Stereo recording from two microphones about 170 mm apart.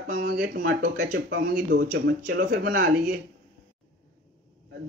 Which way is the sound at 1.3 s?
90° right.